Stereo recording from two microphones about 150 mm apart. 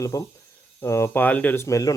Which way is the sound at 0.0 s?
20° left (ahead or behind).